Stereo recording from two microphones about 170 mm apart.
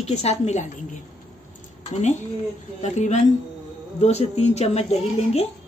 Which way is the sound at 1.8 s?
40° left (ahead or behind).